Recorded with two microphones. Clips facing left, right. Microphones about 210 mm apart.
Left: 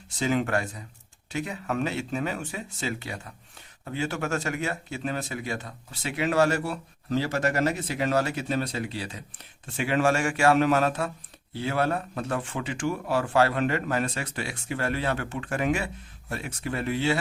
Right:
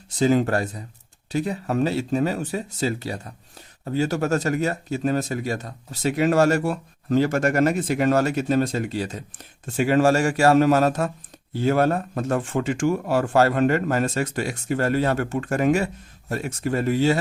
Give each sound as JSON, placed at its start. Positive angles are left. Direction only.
{"t": 0.2, "sound": "speech", "side_deg": -35}